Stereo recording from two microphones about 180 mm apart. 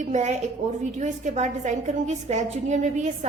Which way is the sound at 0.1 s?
40° right (ahead or behind).